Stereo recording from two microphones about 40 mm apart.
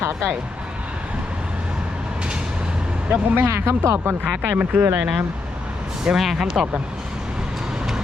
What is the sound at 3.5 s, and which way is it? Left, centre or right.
Speech, right.